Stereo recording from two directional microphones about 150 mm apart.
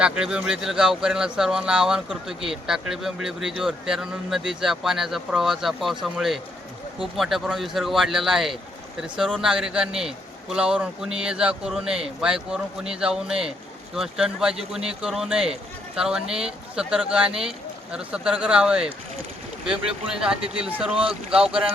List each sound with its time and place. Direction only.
0.0 s a man's voice: 5° right (ahead or behind)
20.9 s speech: 40° right (ahead or behind)
21.2 s speech: 5° right (ahead or behind)